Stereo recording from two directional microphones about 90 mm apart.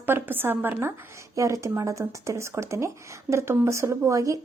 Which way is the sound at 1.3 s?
35° right (ahead or behind).